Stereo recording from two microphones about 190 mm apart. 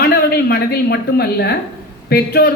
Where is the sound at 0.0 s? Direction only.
55° left (ahead or behind).